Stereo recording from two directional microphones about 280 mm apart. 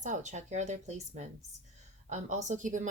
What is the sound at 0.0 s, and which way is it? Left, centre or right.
Speech, right.